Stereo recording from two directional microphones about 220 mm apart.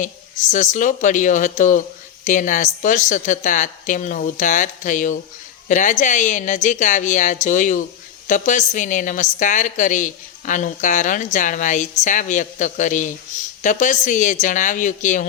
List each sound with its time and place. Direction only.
0.0 s a woman's voice: 35° left (ahead or behind)